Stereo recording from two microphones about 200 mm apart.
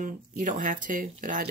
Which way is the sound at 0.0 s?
40° right (ahead or behind).